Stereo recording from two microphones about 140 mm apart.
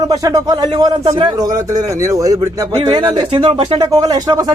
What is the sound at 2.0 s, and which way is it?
Speech, 25° right (ahead or behind).